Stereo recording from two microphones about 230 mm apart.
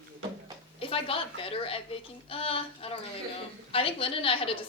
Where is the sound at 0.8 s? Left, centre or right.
Left.